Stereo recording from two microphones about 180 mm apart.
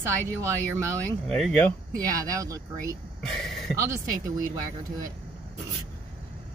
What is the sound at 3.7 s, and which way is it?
Speech, 15° right (ahead or behind).